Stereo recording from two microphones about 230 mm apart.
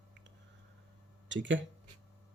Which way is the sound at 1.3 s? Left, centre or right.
Right.